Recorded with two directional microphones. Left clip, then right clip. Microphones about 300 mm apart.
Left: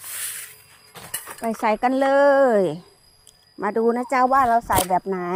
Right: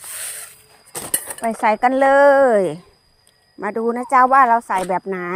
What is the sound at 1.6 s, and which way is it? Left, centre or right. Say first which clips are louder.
Speech: right 5 dB; centre.